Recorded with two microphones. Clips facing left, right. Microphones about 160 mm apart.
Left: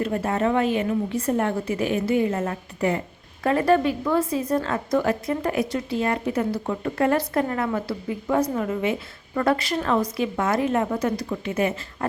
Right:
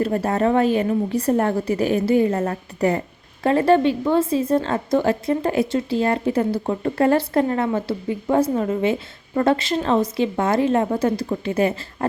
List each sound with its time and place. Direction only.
0.0 s a woman's voice: 40° right (ahead or behind)
3.4 s a woman's voice: 30° right (ahead or behind)